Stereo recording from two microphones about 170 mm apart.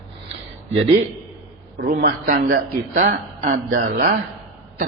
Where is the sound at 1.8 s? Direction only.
60° right (ahead or behind).